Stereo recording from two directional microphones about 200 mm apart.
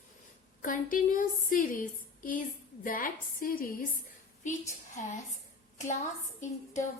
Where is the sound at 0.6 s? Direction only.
40° left (ahead or behind).